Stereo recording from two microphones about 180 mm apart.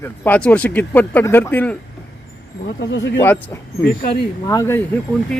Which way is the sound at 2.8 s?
85° left.